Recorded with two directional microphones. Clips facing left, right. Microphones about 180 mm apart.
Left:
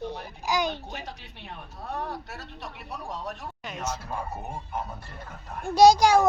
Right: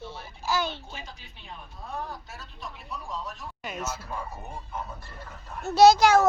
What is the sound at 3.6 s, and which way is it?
Speech, 5° right (ahead or behind).